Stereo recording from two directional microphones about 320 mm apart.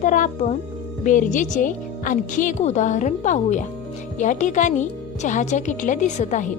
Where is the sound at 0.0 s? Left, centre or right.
Left.